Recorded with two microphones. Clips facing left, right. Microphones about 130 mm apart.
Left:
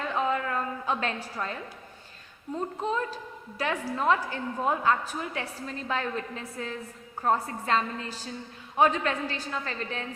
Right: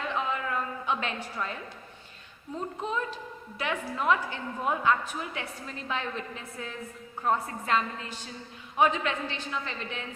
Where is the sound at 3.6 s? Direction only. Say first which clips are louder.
Left 2 dB; 30° left (ahead or behind).